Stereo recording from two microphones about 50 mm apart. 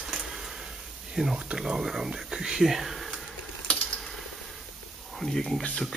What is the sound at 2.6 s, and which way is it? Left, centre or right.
Speech, centre.